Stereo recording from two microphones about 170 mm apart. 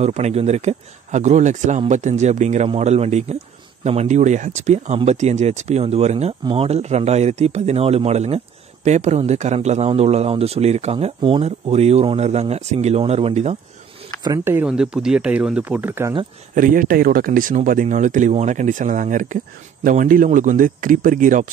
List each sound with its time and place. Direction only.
0.0 s a man's voice: 40° right (ahead or behind)
14.2 s speech: 15° right (ahead or behind)
16.5 s speech: 55° right (ahead or behind)